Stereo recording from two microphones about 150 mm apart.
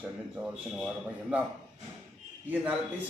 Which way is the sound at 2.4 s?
10° right (ahead or behind).